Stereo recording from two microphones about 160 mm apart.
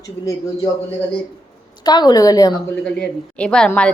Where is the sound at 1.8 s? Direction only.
25° left (ahead or behind).